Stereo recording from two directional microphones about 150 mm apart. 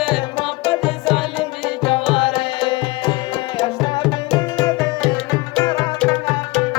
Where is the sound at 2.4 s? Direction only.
30° left (ahead or behind).